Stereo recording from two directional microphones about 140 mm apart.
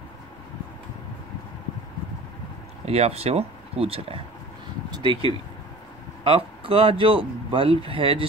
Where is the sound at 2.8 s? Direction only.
45° right (ahead or behind).